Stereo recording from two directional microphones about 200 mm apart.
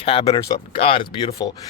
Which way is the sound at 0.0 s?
30° left (ahead or behind).